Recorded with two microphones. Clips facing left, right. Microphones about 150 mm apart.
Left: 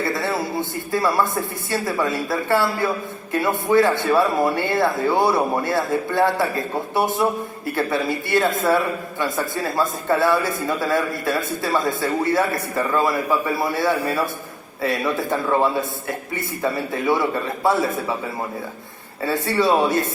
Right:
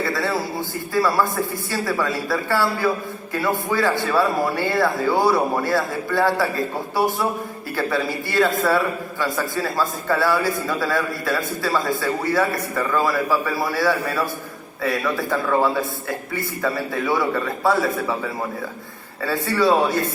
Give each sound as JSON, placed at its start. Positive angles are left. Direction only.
{"t": 0.1, "sound": "speech", "side_deg": 20}
{"t": 19.2, "sound": "speech", "side_deg": 25}